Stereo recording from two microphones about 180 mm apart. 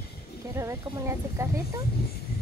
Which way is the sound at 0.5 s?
15° right (ahead or behind).